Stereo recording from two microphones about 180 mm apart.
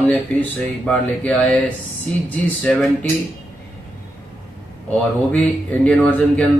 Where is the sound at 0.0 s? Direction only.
5° left (ahead or behind).